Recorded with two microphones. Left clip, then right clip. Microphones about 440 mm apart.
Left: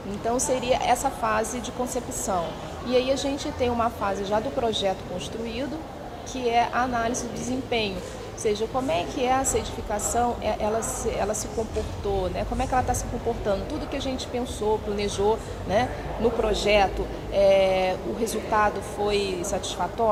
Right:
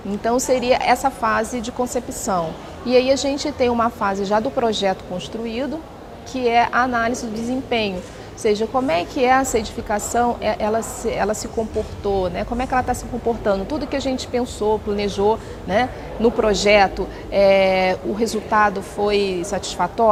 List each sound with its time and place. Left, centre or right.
0.3 s a woman's voice: right
6.4 s a woman's voice: right